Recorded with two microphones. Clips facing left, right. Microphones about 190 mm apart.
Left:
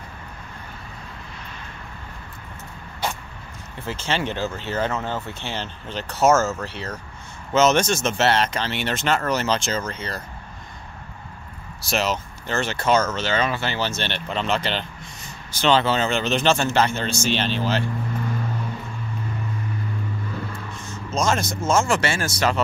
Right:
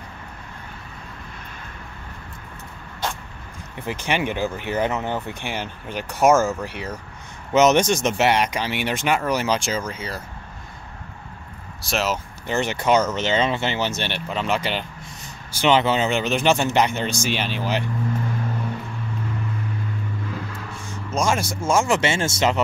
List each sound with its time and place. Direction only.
3.8 s speech: 15° right (ahead or behind)
11.8 s speech: centre (ahead or behind)
12.4 s speech: 15° right (ahead or behind)
20.8 s speech: 10° right (ahead or behind)